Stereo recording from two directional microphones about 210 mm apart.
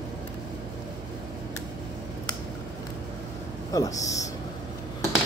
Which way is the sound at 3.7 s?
15° left (ahead or behind).